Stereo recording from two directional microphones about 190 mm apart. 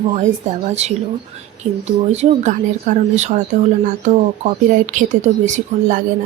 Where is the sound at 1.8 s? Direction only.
35° right (ahead or behind).